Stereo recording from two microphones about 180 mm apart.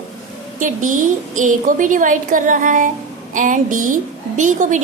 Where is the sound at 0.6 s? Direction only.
45° right (ahead or behind).